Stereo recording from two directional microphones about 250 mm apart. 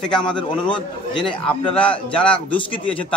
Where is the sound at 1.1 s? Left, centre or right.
Centre.